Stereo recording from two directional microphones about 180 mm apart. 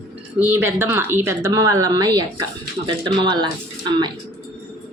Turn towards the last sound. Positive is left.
turn(degrees=-25)  # may be behind; listen again after turning